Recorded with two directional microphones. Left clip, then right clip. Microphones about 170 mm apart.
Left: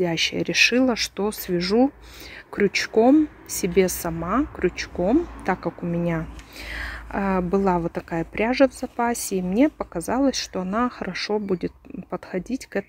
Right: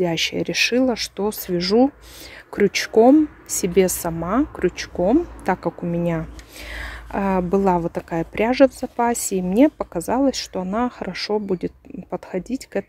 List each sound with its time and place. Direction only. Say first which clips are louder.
0.0 s a woman's voice: right 2 dB; 10° right (ahead or behind)
10.1 s a woman's voice: right 2 dB; 5° right (ahead or behind)